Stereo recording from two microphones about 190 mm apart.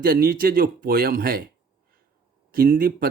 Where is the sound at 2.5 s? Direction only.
50° right (ahead or behind).